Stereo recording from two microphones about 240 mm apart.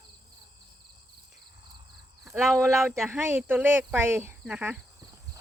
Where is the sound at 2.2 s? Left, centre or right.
Centre.